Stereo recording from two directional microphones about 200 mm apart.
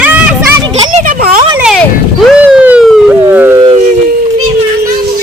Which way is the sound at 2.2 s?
5° right (ahead or behind).